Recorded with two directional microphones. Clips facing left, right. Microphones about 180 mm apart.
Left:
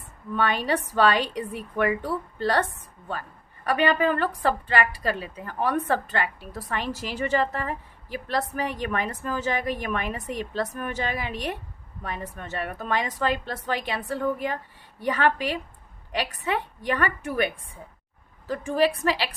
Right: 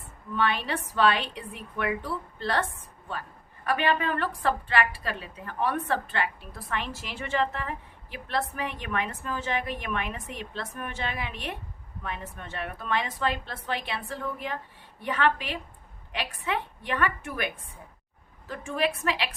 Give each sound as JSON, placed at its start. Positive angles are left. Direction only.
{"t": 0.3, "sound": "a woman's voice", "side_deg": 45}
{"t": 3.8, "sound": "a woman's voice", "side_deg": 40}